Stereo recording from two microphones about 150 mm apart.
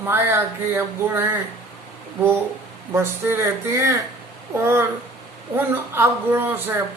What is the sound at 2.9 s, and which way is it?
Speech, 15° right (ahead or behind).